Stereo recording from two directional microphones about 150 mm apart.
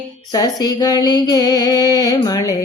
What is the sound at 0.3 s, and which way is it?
Music, 25° left (ahead or behind).